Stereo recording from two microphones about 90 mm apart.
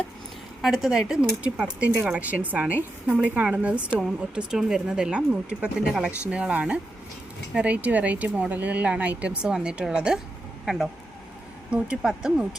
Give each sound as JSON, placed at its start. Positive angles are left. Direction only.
{"t": 0.6, "sound": "a woman's voice", "side_deg": -5}
{"t": 11.7, "sound": "speech", "side_deg": -10}